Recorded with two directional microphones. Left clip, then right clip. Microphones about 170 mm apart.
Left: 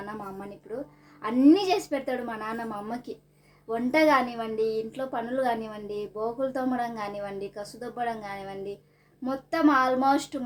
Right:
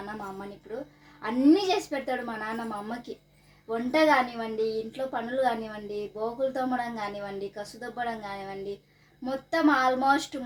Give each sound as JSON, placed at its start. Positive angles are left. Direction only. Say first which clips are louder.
{"t": 0.0, "sound": "a woman's voice", "louder": "even", "side_deg": 15}